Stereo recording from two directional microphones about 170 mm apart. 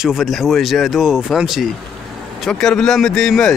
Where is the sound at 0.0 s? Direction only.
Centre (ahead or behind).